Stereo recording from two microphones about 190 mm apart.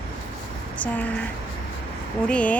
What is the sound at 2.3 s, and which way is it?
Speech, 5° left (ahead or behind).